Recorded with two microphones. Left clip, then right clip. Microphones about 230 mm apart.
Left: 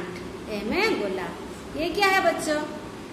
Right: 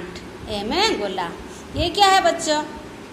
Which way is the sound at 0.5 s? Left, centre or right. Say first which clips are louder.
Right 4 dB; centre.